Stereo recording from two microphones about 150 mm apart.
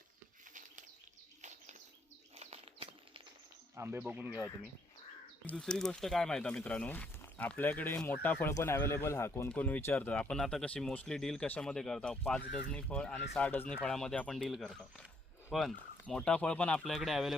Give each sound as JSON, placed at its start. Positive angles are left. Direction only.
{"t": 1.4, "sound": "bird", "side_deg": -50}
{"t": 3.8, "sound": "speech", "side_deg": -15}
{"t": 4.3, "sound": "speech", "side_deg": 20}
{"t": 5.5, "sound": "speech", "side_deg": 5}